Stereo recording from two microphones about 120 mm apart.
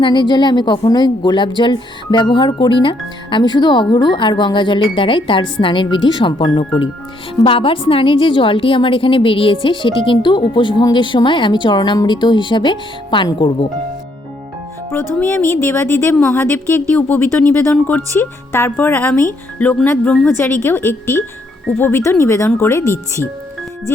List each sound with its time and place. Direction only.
0.0 s a woman's voice: 40° left (ahead or behind)
15.2 s speech: 15° left (ahead or behind)